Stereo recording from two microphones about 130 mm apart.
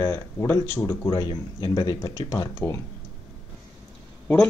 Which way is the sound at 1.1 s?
35° left (ahead or behind).